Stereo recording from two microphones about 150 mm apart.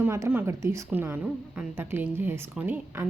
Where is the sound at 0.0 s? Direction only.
15° right (ahead or behind).